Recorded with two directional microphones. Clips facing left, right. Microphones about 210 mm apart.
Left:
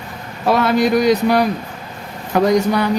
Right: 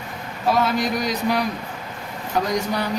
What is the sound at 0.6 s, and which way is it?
Speech, 70° left (ahead or behind).